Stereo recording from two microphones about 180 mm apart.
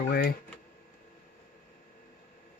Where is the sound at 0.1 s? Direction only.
60° left (ahead or behind).